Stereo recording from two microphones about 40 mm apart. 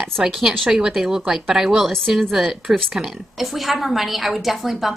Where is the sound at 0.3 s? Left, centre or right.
Centre.